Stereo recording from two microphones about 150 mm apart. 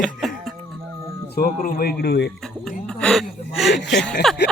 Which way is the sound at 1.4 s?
70° left (ahead or behind).